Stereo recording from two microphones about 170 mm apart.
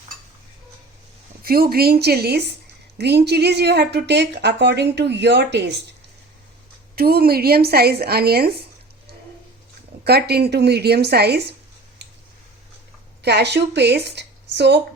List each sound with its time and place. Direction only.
1.4 s a woman's voice: 60° right (ahead or behind); by 5.8 s 90° right
6.9 s a woman's voice: 65° right (ahead or behind)
10.0 s speech: 70° right (ahead or behind)
13.2 s a woman's voice: 85° right